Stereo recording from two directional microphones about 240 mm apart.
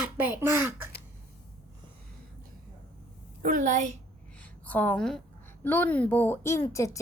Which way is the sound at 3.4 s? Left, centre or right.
Right.